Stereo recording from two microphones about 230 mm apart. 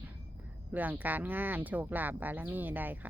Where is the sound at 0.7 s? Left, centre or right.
Centre.